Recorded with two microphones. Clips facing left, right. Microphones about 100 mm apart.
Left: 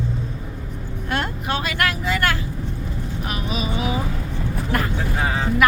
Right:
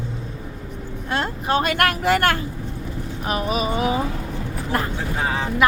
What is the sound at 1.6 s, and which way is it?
Speech, 50° right (ahead or behind).